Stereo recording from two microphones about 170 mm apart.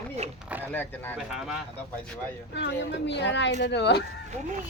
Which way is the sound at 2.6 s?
90° left.